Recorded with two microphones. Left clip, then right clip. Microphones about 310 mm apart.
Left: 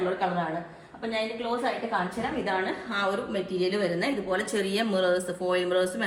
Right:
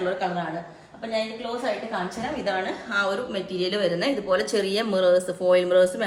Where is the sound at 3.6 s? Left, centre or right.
Centre; by 5.9 s right.